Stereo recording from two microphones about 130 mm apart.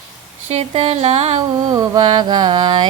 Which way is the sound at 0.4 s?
50° right (ahead or behind).